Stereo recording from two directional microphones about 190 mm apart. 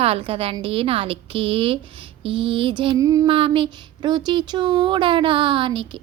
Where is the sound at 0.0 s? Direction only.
30° right (ahead or behind).